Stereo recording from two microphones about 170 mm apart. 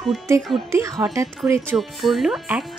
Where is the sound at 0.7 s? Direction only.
20° right (ahead or behind).